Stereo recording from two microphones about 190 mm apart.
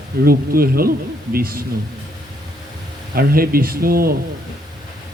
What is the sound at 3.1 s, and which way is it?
Speech, 50° right (ahead or behind).